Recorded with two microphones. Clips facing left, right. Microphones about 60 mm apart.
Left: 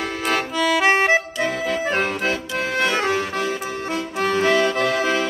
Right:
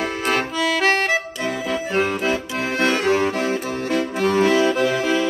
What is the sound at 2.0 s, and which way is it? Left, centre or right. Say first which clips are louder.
Accordion: right 2 dB; centre.